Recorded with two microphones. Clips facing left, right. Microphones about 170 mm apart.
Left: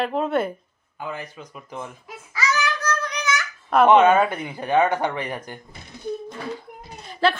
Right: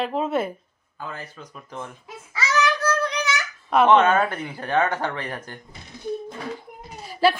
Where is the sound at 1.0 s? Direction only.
15° left (ahead or behind).